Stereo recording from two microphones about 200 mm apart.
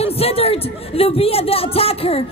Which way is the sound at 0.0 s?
30° left (ahead or behind).